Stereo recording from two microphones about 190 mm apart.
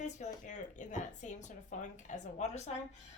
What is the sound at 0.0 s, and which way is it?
A woman's voice, 40° left (ahead or behind).